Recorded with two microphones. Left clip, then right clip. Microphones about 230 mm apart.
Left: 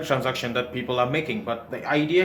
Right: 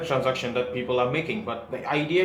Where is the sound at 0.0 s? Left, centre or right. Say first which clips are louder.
Even; left.